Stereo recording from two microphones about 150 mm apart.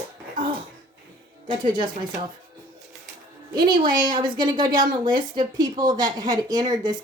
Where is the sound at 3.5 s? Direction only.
30° right (ahead or behind).